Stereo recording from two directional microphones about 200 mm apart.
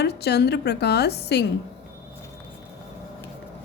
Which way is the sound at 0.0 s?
55° left (ahead or behind).